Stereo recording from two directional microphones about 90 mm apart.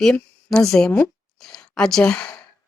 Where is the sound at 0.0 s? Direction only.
5° left (ahead or behind).